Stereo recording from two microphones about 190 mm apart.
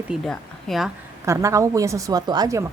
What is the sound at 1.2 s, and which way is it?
Speech, 15° right (ahead or behind).